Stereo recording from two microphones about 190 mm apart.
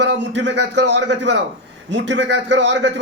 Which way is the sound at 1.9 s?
70° right (ahead or behind).